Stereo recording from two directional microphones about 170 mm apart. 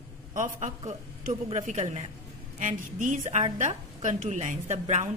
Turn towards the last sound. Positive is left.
turn(degrees=-40)  # may be behind; listen again after turning